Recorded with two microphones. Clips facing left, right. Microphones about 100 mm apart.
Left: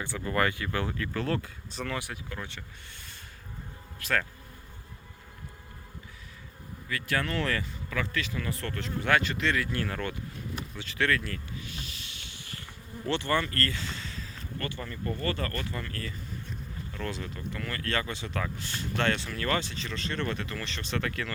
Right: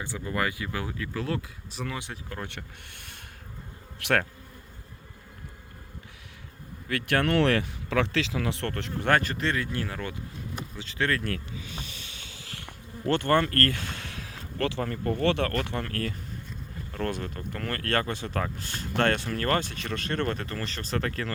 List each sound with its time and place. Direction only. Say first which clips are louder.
0.0 s speech: left 1 dB; 15° right (ahead or behind)
2.5 s speech: right 3 dB; 60° right (ahead or behind)
4.0 s speech: right 5 dB; 80° right
6.8 s speech: right 5 dB; 65° right (ahead or behind)
9.1 s speech: left 1 dB; 40° right (ahead or behind)
9.7 s speech: even; 15° right (ahead or behind)
10.8 s speech: even; 25° right (ahead or behind)
12.5 s insect: right 2 dB; 75° right (ahead or behind)
13.1 s speech: right 5 dB; 50° right (ahead or behind)
16.9 s speech: right 5 dB; 50° right (ahead or behind)